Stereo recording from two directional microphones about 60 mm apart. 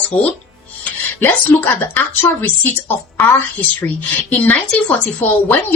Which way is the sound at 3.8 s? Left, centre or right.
Left.